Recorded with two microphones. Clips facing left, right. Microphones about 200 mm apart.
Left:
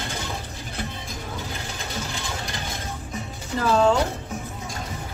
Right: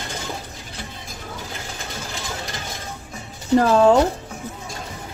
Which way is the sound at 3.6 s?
45° right (ahead or behind).